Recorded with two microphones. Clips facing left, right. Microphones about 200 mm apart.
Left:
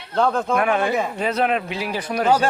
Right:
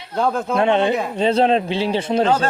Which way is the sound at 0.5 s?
25° right (ahead or behind).